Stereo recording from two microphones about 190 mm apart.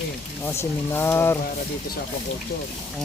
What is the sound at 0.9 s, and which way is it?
Speech, 10° left (ahead or behind).